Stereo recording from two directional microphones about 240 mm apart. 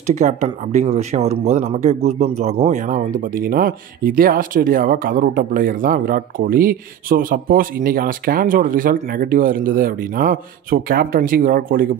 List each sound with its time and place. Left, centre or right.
0.0 s speech: right